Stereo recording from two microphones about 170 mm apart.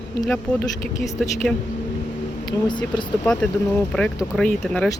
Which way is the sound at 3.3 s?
5° left (ahead or behind).